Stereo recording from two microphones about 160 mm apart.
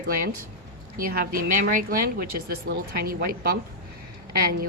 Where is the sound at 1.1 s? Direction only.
70° right (ahead or behind).